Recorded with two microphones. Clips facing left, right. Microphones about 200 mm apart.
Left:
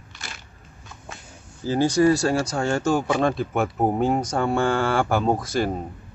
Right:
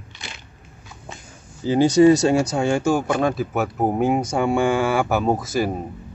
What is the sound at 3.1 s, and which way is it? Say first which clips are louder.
Speech: right 1 dB; centre (ahead or behind).